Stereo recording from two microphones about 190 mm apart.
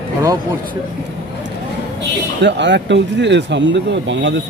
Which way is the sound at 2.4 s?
65° right (ahead or behind).